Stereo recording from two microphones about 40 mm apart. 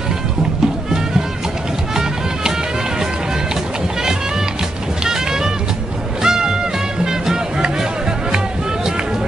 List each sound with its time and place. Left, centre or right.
5.0 s music: centre